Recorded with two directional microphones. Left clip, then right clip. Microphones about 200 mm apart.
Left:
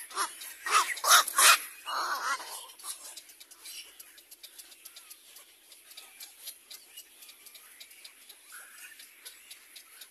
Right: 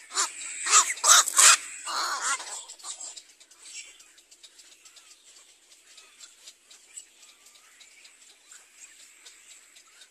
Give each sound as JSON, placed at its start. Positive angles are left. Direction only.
{"t": 0.1, "sound": "dog", "side_deg": -50}